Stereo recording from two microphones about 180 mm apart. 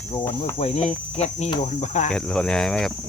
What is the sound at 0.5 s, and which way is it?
Speech, 35° left (ahead or behind).